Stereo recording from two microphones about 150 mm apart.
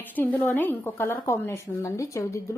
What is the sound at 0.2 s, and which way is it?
A woman's voice, 15° left (ahead or behind).